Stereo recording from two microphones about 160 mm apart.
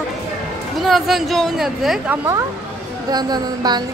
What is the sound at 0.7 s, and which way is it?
Speech, centre (ahead or behind).